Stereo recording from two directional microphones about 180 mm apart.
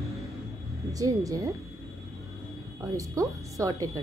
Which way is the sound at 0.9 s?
20° right (ahead or behind).